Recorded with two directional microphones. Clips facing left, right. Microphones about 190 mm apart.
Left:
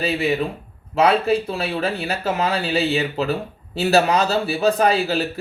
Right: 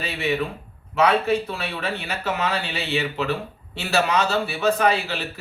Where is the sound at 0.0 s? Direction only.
35° left (ahead or behind).